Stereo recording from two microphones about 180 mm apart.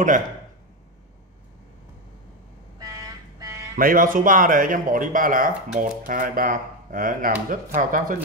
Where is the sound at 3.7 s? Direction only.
50° right (ahead or behind).